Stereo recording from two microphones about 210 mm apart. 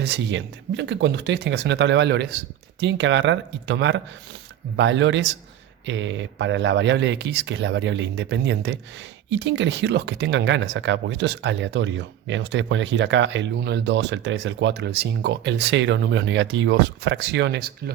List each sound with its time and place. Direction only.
0.0 s speech: 55° right (ahead or behind)